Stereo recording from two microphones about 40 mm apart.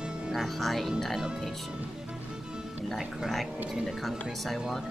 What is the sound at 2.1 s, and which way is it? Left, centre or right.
Music, centre.